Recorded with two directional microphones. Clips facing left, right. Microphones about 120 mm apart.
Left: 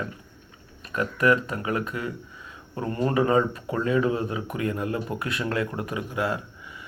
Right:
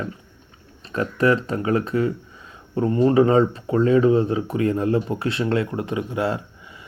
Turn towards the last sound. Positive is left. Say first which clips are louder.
# right 4 dB
turn(degrees=-30)  # may be behind; listen again after turning